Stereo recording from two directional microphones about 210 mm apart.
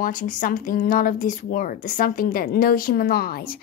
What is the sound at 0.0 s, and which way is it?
Speech, 40° left (ahead or behind).